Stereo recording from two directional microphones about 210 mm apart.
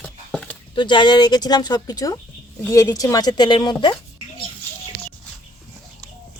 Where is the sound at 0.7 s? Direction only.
20° left (ahead or behind).